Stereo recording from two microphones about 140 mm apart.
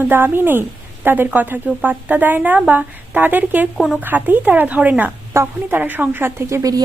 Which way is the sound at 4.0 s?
15° right (ahead or behind).